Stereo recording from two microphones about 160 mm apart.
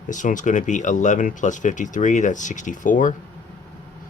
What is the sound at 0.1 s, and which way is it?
Speech, 50° left (ahead or behind).